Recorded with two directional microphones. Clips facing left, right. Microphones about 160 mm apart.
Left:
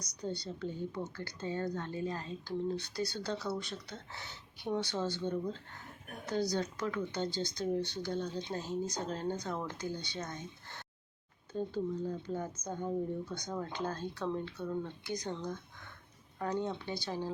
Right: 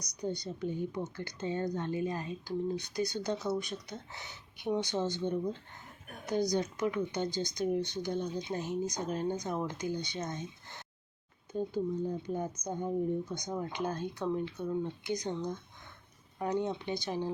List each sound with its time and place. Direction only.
0.0 s a woman's voice: 15° right (ahead or behind)